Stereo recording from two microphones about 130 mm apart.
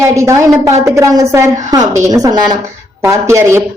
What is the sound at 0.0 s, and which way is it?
Speech, 20° right (ahead or behind).